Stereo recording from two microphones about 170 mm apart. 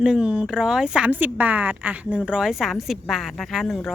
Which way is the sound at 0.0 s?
5° right (ahead or behind).